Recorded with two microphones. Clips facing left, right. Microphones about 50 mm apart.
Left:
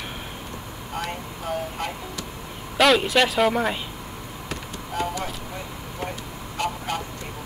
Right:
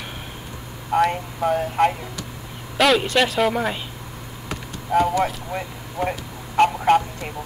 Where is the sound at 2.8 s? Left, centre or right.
Centre.